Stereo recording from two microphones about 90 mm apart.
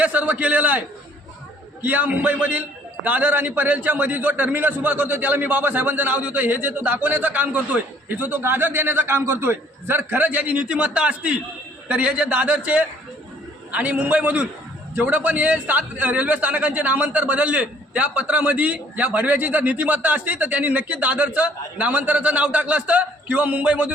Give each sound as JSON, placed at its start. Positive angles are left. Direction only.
{"t": 0.0, "sound": "a man's voice", "side_deg": -15}